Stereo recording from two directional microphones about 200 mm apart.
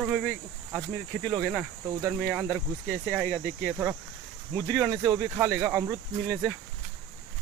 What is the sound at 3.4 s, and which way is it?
Speech, 45° right (ahead or behind).